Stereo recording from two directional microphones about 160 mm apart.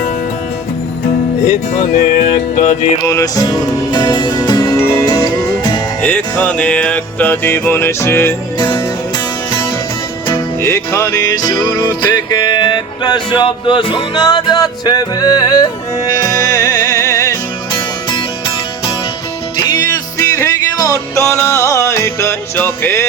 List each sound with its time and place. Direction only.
1.5 s music: 65° left (ahead or behind)
2.2 s music: 30° left (ahead or behind)
3.0 s music: 20° left (ahead or behind)
6.0 s music: 10° left (ahead or behind)
9.1 s music: 25° left (ahead or behind)
10.6 s music: 15° left (ahead or behind)
17.7 s music: 35° left (ahead or behind)
19.5 s music: 20° left (ahead or behind)